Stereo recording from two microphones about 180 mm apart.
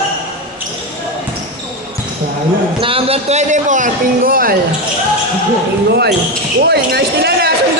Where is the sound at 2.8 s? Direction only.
30° right (ahead or behind); by 4.5 s 55° right (ahead or behind).